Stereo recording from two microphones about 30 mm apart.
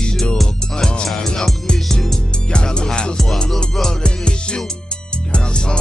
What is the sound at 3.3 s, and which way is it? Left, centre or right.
Music, centre.